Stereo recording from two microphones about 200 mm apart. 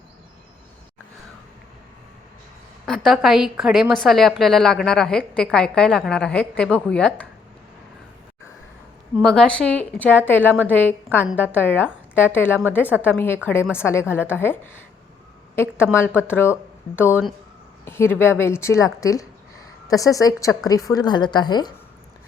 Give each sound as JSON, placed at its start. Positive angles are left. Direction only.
{"t": 2.8, "sound": "a woman's voice", "side_deg": 0}
{"t": 9.2, "sound": "a woman's voice", "side_deg": 5}